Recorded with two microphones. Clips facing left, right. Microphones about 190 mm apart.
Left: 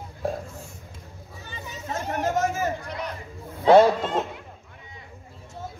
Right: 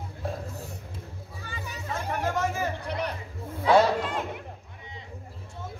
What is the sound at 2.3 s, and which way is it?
Speech, 45° left (ahead or behind).